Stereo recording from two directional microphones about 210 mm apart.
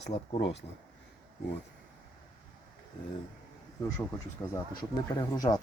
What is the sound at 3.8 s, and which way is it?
Speech, 15° left (ahead or behind).